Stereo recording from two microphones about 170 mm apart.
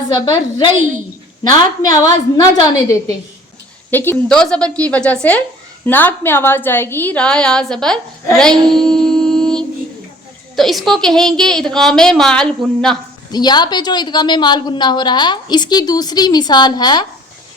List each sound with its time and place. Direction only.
0.1 s a woman's voice: 25° left (ahead or behind)
3.9 s a woman's voice: 10° left (ahead or behind)
13.3 s a woman's voice: 25° left (ahead or behind)